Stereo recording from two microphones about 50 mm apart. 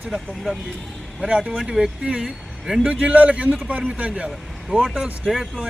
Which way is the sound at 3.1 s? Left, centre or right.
Right.